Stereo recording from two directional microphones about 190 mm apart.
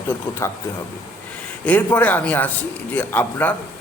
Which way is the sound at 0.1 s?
15° left (ahead or behind).